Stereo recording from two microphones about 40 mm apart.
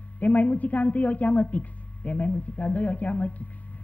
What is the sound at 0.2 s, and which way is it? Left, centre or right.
Speech, left.